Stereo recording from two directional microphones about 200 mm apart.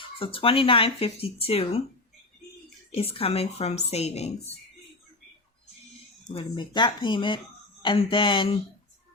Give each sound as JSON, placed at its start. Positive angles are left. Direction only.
{"t": 0.0, "sound": "speech", "side_deg": 25}
{"t": 2.9, "sound": "a woman's voice", "side_deg": 30}
{"t": 6.2, "sound": "speech", "side_deg": 25}